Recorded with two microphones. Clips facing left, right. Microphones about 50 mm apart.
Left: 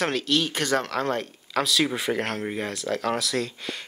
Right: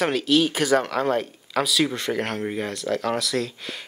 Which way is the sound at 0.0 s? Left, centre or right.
Centre.